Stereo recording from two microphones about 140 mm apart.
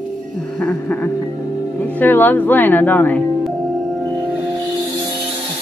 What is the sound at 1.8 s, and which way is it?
Speech, 15° left (ahead or behind).